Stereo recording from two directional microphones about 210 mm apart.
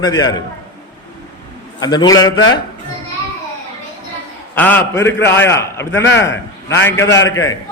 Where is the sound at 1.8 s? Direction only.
20° left (ahead or behind).